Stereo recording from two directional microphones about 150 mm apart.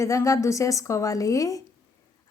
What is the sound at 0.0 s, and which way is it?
Speech, 20° left (ahead or behind).